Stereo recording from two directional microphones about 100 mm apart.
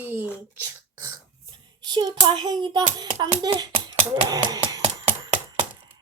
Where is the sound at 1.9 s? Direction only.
50° right (ahead or behind).